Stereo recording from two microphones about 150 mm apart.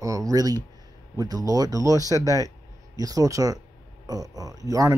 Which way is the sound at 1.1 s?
25° right (ahead or behind).